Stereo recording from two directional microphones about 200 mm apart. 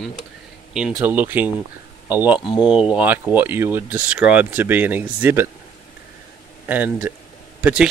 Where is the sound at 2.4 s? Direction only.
25° left (ahead or behind).